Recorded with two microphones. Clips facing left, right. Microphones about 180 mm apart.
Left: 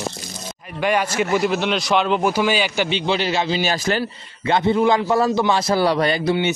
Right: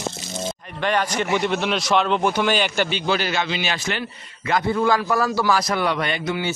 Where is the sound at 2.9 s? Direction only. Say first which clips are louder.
Left 2 dB; 25° left (ahead or behind).